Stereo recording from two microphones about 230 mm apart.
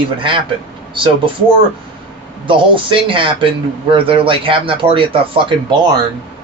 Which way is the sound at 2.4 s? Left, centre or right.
Right.